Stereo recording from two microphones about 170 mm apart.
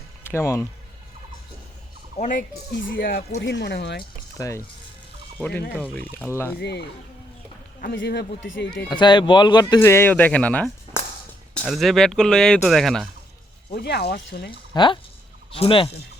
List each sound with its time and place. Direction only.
0.3 s speech: 15° left (ahead or behind)
2.1 s speech: 45° left (ahead or behind)
2.7 s speech: 80° left
4.4 s speech: 20° left (ahead or behind)
6.6 s speech: 80° left
7.8 s speech: 70° left (ahead or behind)
8.4 s speech: 90° left
8.9 s speech: 25° left (ahead or behind); by 13.1 s centre (ahead or behind)
13.7 s speech: 70° left (ahead or behind)
14.7 s speech: 25° left (ahead or behind)